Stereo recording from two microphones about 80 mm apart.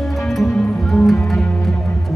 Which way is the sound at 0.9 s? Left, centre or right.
Centre.